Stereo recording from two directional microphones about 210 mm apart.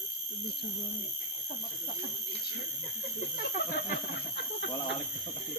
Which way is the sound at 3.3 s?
45° left (ahead or behind).